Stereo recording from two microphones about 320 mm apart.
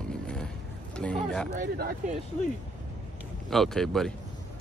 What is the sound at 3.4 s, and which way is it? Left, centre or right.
Speech, centre.